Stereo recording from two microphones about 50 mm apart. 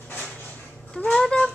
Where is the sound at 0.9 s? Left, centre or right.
Left.